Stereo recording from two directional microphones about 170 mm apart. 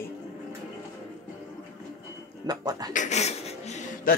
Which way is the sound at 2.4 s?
20° right (ahead or behind).